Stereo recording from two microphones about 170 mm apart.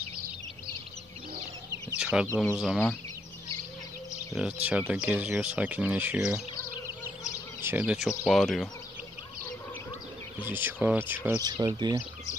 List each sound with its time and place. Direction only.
2.0 s chicken: 5° right (ahead or behind)
2.6 s speech: centre (ahead or behind)
4.4 s speech: 5° right (ahead or behind)
7.6 s speech: 5° right (ahead or behind)
10.4 s speech: 10° right (ahead or behind)
11.2 s speech: 20° right (ahead or behind)